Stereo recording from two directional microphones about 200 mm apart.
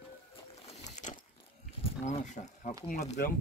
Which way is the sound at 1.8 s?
35° left (ahead or behind).